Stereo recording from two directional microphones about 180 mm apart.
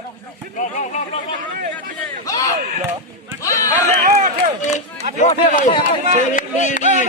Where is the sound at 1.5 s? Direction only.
50° right (ahead or behind).